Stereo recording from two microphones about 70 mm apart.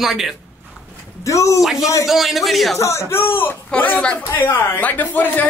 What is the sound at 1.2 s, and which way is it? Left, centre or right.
Speech, left.